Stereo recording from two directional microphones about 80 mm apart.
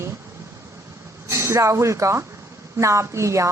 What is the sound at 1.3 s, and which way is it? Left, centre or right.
A woman's voice, right.